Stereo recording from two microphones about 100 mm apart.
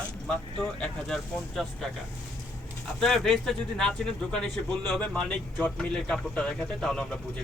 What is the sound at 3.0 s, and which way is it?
Speech, 5° left (ahead or behind).